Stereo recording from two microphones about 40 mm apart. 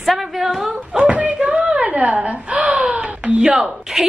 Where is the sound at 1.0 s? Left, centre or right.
Right.